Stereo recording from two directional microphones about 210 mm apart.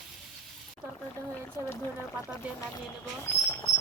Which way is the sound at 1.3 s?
10° left (ahead or behind).